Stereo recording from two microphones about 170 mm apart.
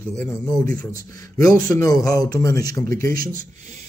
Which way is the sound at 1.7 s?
20° left (ahead or behind).